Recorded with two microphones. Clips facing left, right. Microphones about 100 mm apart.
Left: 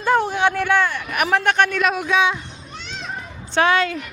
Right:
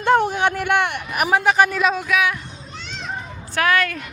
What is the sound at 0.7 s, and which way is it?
Speech, 60° right (ahead or behind).